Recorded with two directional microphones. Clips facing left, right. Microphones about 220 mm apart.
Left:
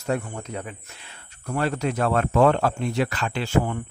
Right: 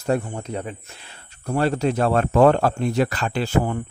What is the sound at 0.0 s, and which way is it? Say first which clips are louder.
A man's voice: right 4 dB; 35° right (ahead or behind).